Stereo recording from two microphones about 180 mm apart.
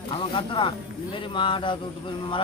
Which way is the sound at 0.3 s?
30° left (ahead or behind).